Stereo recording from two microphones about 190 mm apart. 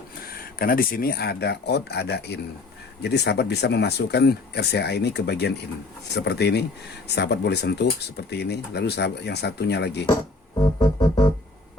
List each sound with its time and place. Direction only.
0.6 s speech: 50° left (ahead or behind)
10.8 s music: 20° left (ahead or behind)